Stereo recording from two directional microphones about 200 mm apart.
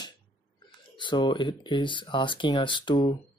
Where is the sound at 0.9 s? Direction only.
25° left (ahead or behind).